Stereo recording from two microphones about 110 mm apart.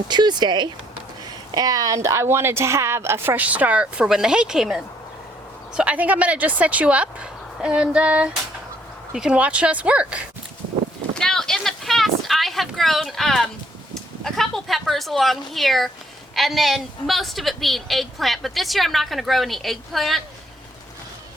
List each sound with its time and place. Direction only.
0.1 s a woman's voice: 40° right (ahead or behind); by 10.2 s 10° right (ahead or behind)
11.1 s a sound: 5° left (ahead or behind)
13.9 s a woman's voice: 5° left (ahead or behind)